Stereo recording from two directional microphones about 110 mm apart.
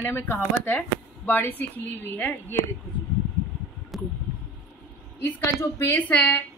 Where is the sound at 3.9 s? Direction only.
Centre (ahead or behind).